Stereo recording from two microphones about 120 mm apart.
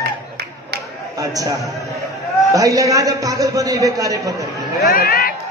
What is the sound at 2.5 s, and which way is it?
A man's voice, 30° right (ahead or behind).